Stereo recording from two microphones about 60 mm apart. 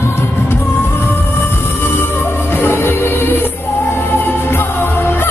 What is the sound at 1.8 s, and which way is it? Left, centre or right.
Music, left.